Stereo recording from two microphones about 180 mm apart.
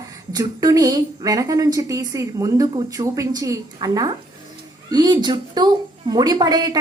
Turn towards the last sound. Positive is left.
turn(degrees=-20)  # may be behind; listen again after turning